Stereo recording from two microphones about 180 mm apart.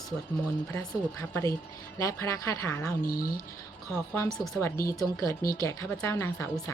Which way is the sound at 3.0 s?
50° left (ahead or behind).